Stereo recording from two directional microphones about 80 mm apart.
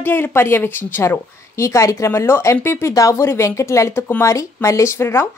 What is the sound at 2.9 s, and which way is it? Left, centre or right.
Speech, left.